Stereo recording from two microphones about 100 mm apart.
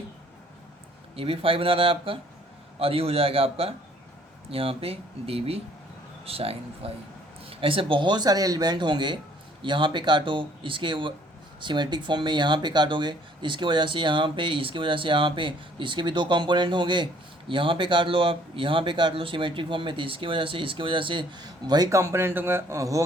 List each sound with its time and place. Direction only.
1.1 s speech: 70° right (ahead or behind)
7.5 s speech: 65° right (ahead or behind); by 23.0 s 35° right (ahead or behind)